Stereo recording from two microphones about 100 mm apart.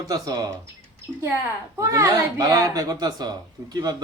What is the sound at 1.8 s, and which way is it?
Speech, 35° right (ahead or behind).